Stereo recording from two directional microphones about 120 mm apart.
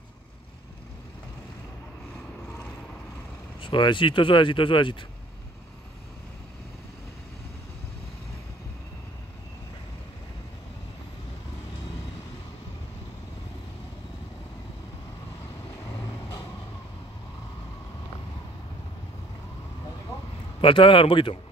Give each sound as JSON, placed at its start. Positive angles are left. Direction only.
{"t": 3.6, "sound": "speech", "side_deg": 45}
{"t": 20.6, "sound": "speech", "side_deg": 45}